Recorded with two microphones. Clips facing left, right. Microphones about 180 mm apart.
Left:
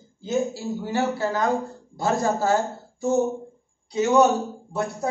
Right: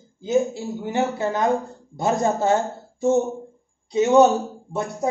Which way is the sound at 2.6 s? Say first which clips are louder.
Right 1 dB; centre (ahead or behind).